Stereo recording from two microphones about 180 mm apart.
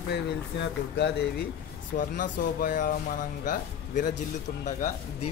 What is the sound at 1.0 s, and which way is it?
Speech, 70° left (ahead or behind).